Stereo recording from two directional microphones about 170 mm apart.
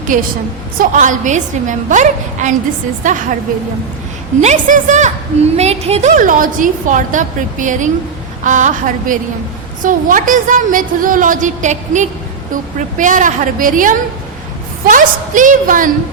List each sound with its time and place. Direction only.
0.1 s a woman's voice: 50° right (ahead or behind)
4.4 s a woman's voice: 45° right (ahead or behind)